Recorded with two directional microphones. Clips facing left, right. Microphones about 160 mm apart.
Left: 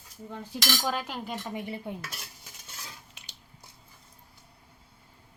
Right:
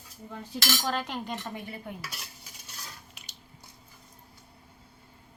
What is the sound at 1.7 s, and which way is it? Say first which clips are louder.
Speech: left 3 dB; 25° left (ahead or behind).